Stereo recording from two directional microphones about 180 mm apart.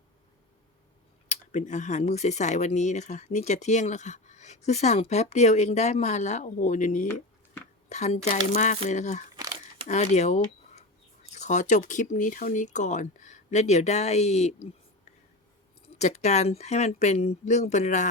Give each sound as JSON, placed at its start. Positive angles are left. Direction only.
{"t": 1.3, "sound": "speech", "side_deg": 40}
{"t": 9.3, "sound": "crumpling", "side_deg": -20}
{"t": 9.8, "sound": "speech", "side_deg": 40}
{"t": 16.0, "sound": "speech", "side_deg": 40}